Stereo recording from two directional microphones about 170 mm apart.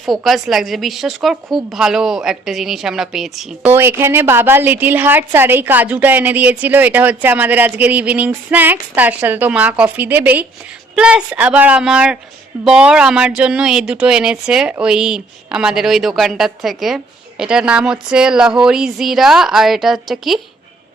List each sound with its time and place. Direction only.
0.0 s speech: centre (ahead or behind)
3.7 s a woman's voice: 15° right (ahead or behind)